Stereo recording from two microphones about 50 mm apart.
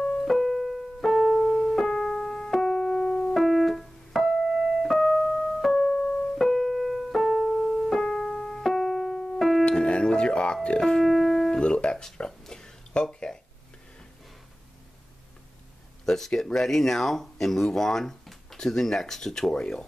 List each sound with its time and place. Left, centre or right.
0.2 s keyboard: centre
1.7 s piano: centre
4.9 s keyboard: centre
6.3 s piano: centre
9.7 s music: centre
11.5 s music: centre
16.1 s speech: centre